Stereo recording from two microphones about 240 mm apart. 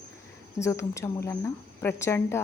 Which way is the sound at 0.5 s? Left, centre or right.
Centre.